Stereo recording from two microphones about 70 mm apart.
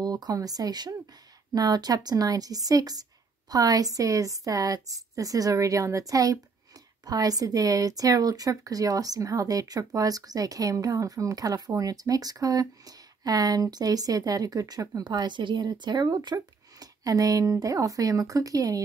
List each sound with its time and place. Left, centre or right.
0.0 s speech: right
16.8 s speech: right